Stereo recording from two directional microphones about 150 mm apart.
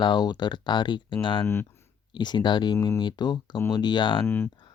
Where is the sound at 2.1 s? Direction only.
30° left (ahead or behind).